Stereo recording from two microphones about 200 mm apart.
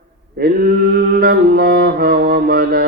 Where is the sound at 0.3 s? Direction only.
50° right (ahead or behind).